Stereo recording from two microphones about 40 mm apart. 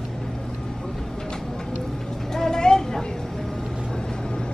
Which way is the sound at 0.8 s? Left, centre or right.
Centre.